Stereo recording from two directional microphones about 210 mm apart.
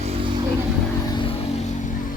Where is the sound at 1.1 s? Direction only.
25° left (ahead or behind).